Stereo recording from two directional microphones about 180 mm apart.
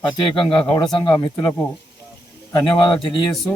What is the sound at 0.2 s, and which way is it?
Speech, 30° left (ahead or behind).